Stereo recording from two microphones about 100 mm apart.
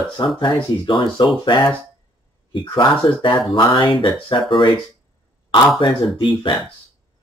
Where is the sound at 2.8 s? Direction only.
50° left (ahead or behind).